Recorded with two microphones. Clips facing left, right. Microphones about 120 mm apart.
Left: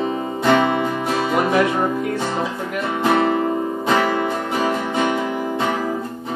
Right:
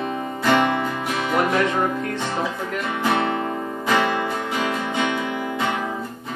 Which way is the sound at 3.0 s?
25° left (ahead or behind).